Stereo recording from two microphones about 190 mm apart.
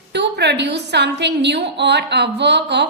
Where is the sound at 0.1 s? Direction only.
65° right (ahead or behind).